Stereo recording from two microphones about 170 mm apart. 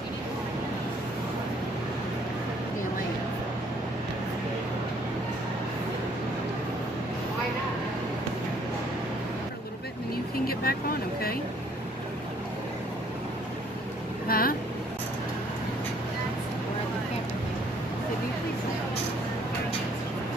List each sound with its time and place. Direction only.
10.4 s vehicle: 60° left (ahead or behind)
14.2 s vehicle: 60° left (ahead or behind)